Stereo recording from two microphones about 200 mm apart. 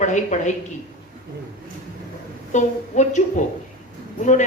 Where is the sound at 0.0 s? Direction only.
35° left (ahead or behind).